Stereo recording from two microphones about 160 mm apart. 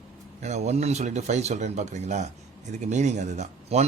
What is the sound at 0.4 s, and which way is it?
Speech, 45° right (ahead or behind).